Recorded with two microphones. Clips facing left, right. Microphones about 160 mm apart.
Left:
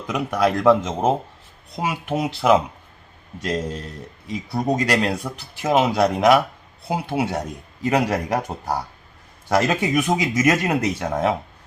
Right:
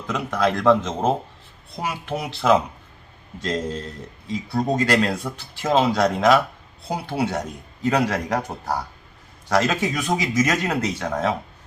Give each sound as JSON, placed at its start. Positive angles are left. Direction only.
{"t": 0.1, "sound": "speech", "side_deg": 10}
{"t": 1.8, "sound": "speech", "side_deg": 20}